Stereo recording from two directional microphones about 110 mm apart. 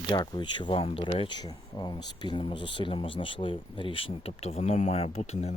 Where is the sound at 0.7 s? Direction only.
60° left (ahead or behind); by 5.5 s 80° left.